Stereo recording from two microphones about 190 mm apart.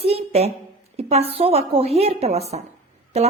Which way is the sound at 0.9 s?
30° right (ahead or behind).